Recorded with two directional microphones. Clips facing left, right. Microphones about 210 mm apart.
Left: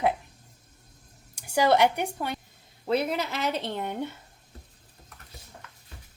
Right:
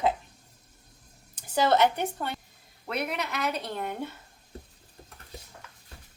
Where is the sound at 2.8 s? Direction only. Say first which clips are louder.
Left 6 dB; 30° left (ahead or behind).